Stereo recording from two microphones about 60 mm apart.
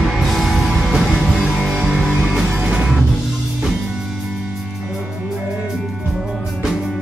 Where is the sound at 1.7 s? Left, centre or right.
Centre.